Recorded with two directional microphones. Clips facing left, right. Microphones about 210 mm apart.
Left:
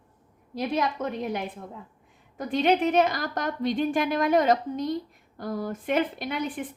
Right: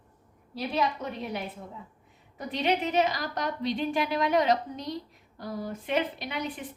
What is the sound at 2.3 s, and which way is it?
A woman's voice, 50° left (ahead or behind).